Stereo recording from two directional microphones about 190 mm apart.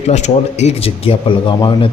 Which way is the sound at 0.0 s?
35° left (ahead or behind).